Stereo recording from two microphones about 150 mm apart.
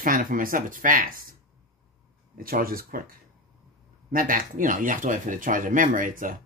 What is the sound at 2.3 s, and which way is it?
Speech, 75° right (ahead or behind).